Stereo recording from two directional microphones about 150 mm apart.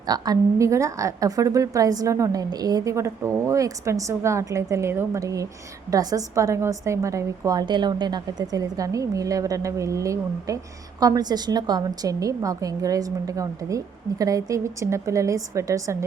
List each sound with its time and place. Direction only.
0.0 s a woman's voice: 25° right (ahead or behind)